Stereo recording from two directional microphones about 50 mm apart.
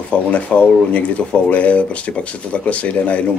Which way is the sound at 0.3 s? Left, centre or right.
Left.